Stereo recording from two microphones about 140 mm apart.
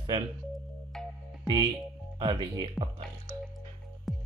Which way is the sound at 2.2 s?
35° right (ahead or behind).